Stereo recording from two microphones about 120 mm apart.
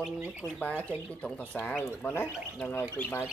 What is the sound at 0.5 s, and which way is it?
Speech, 10° left (ahead or behind).